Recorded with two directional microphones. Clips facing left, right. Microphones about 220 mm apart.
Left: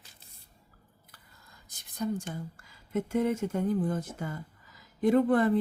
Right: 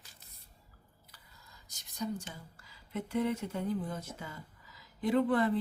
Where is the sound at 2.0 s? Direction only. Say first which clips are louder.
Left 5 dB; 50° left (ahead or behind).